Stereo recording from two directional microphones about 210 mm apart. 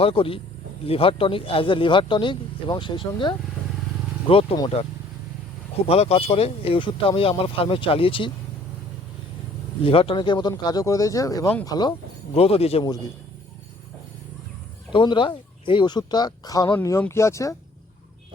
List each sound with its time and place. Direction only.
0.0 s speech: 25° left (ahead or behind)
5.9 s speech: 30° left (ahead or behind)
9.8 s speech: 25° left (ahead or behind)
14.9 s speech: 20° left (ahead or behind)